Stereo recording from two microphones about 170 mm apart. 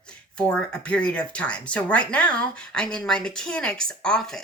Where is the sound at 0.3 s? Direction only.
5° left (ahead or behind).